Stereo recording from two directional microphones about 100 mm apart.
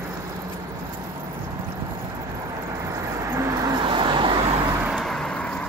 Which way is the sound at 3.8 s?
55° right (ahead or behind).